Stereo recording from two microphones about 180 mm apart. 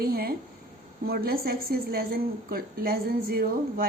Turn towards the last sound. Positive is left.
turn(degrees=-55)  # may be behind; listen again after turning